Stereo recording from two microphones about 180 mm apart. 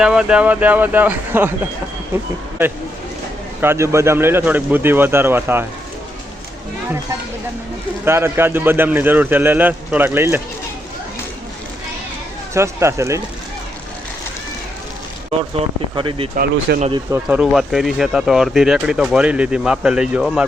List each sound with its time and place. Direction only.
0.0 s speech: 5° right (ahead or behind)
3.6 s speech: 15° right (ahead or behind)
8.0 s speech: 15° right (ahead or behind)
12.5 s speech: 15° right (ahead or behind)
15.3 s speech: 30° right (ahead or behind)
16.4 s speech: 60° right (ahead or behind)
17.2 s speech: 5° right (ahead or behind)